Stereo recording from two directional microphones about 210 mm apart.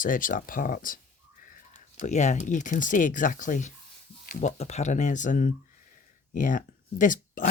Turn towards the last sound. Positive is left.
turn(degrees=40)  # may be behind; listen again after turning